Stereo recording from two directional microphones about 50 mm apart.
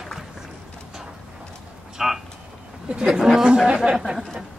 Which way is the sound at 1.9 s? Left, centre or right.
Centre.